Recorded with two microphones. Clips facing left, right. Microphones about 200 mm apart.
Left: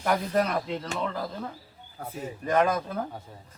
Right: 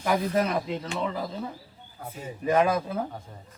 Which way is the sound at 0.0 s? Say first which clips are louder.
Right 1 dB; centre (ahead or behind).